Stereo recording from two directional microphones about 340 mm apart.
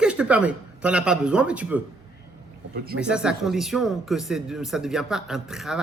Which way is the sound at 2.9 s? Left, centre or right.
Centre.